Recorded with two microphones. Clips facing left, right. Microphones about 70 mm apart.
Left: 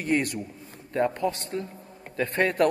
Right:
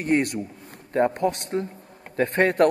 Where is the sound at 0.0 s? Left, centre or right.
Right.